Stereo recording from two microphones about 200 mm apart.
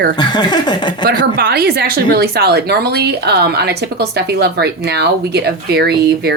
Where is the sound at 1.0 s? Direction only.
55° right (ahead or behind).